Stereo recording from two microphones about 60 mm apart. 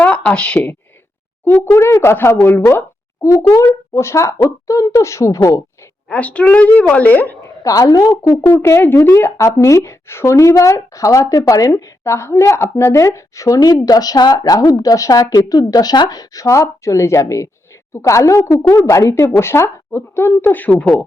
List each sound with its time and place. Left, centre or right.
0.0 s a woman's voice: left
1.5 s speech: left
1.8 s speech: left
3.2 s speech: left
6.1 s a woman's voice: left
7.4 s speech: left
8.8 s speech: left
9.4 s speech: left
10.3 s speech: left
13.8 s speech: left
19.4 s speech: left
20.4 s a woman's voice: left